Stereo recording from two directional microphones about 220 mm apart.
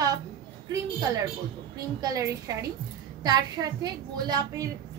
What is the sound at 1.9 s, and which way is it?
A woman's voice, 15° right (ahead or behind).